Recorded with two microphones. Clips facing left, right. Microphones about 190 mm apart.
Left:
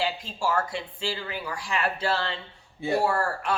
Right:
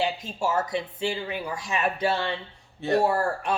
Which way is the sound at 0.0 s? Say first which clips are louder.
Right 2 dB; 20° right (ahead or behind).